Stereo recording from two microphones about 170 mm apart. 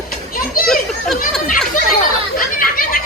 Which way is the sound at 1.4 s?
50° left (ahead or behind).